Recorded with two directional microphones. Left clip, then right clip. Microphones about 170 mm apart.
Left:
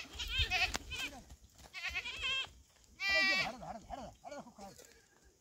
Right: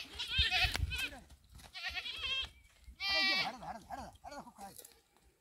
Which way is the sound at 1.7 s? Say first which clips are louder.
Left 1 dB; centre (ahead or behind).